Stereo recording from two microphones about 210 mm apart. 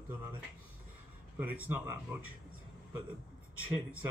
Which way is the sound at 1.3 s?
10° right (ahead or behind).